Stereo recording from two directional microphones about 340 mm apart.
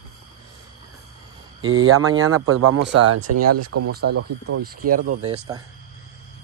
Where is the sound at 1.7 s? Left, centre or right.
Right.